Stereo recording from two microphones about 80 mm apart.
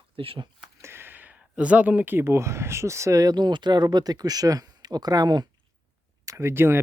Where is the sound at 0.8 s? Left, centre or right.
Right.